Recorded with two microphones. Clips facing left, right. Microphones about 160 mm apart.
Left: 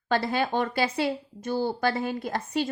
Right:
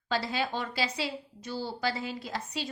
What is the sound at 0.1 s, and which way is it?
A woman's voice, 55° left (ahead or behind).